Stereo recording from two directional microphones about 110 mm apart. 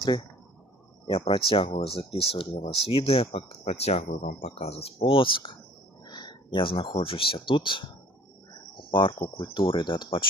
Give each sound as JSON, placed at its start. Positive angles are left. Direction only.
{"t": 1.3, "sound": "speech", "side_deg": 55}
{"t": 6.1, "sound": "a sound", "side_deg": 40}
{"t": 7.0, "sound": "speech", "side_deg": 55}
{"t": 8.9, "sound": "speech", "side_deg": 50}